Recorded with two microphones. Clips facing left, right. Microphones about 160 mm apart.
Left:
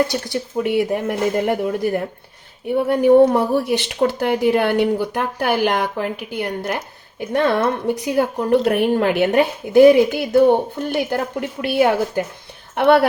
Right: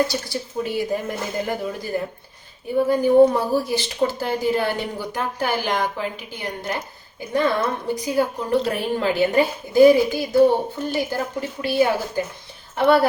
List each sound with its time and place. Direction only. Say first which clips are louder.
0.1 s speech: left 4 dB; 60° left (ahead or behind)